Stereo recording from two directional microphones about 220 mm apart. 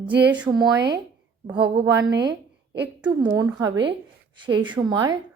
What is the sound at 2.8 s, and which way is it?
A woman's voice, 10° right (ahead or behind).